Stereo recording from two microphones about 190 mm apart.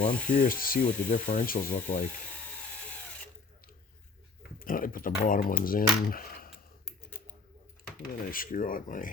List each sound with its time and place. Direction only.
0.3 s speech: 50° left (ahead or behind)
4.6 s speech: 45° left (ahead or behind)
6.8 s typing: 10° left (ahead or behind)
8.0 s speech: 45° left (ahead or behind)